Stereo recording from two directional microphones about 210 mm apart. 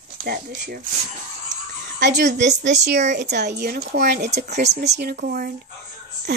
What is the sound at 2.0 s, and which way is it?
A woman's voice, 55° right (ahead or behind).